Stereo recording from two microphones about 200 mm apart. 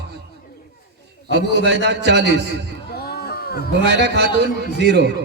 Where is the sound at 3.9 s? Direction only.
60° right (ahead or behind).